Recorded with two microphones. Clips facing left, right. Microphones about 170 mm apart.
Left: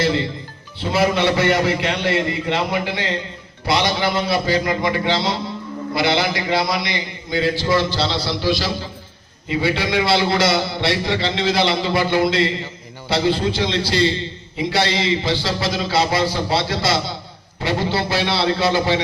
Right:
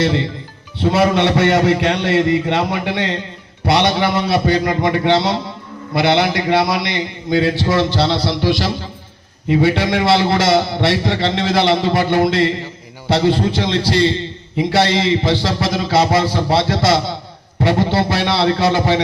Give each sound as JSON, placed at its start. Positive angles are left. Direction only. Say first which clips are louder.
{"t": 0.8, "sound": "a man's voice", "louder": "right 4 dB", "side_deg": -60}